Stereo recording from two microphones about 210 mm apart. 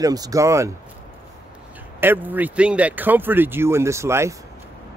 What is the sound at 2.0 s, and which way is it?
Speech, 10° right (ahead or behind).